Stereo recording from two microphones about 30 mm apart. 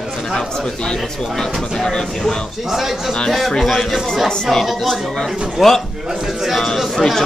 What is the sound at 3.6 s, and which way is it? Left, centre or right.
Speech, centre.